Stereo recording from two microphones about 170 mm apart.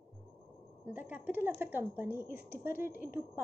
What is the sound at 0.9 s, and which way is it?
A woman's voice, 10° right (ahead or behind).